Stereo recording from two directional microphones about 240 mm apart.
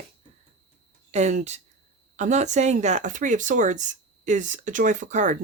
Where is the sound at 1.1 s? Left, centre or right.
Right.